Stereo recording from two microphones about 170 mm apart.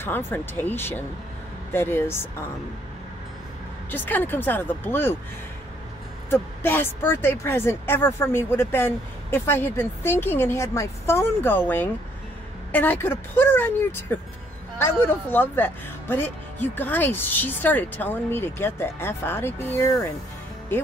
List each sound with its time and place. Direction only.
0.0 s speech: 10° left (ahead or behind)
3.9 s speech: 10° left (ahead or behind)
6.3 s speech: 15° left (ahead or behind)